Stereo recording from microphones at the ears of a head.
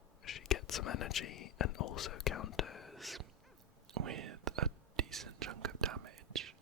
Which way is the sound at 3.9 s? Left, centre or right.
Right.